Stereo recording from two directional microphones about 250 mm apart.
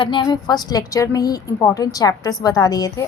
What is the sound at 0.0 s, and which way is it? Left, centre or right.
A woman's voice, centre.